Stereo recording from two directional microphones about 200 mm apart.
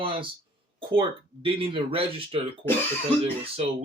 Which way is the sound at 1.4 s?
25° right (ahead or behind).